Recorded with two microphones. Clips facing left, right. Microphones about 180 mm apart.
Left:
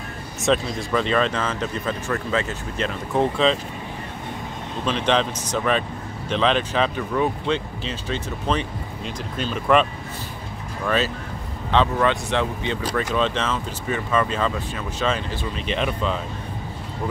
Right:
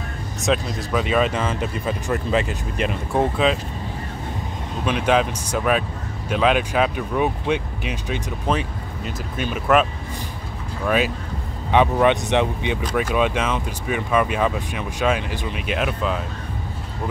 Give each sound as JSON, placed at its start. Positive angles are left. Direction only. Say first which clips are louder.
{"t": 0.5, "sound": "speech", "louder": "left 1 dB", "side_deg": -5}
{"t": 4.8, "sound": "speech", "louder": "right 2 dB", "side_deg": -10}
{"t": 11.7, "sound": "speech", "louder": "right 3 dB", "side_deg": -15}